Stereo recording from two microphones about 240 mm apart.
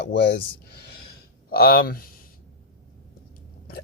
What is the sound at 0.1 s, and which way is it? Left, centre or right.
Speech, left.